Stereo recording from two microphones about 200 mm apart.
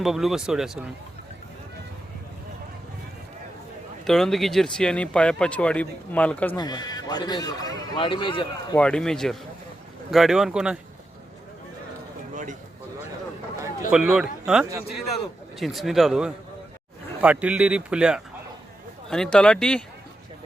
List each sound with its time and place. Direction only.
0.0 s speech: centre (ahead or behind)
4.0 s speech: centre (ahead or behind)
6.6 s speech: 20° left (ahead or behind)
8.7 s speech: 5° left (ahead or behind)
12.3 s a sound: 40° right (ahead or behind)
13.9 s speech: 5° right (ahead or behind)